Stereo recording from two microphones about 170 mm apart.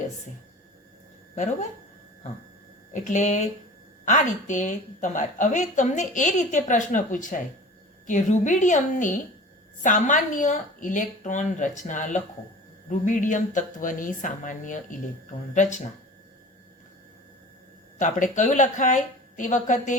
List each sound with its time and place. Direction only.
2.9 s a woman's voice: 45° left (ahead or behind)
18.0 s a woman's voice: 50° left (ahead or behind)